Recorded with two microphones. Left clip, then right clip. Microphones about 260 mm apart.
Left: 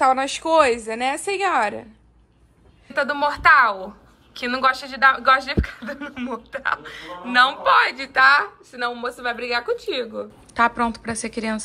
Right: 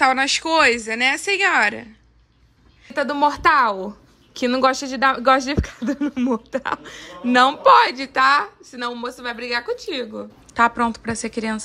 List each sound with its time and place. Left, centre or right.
0.0 s a woman's voice: centre
2.9 s a woman's voice: right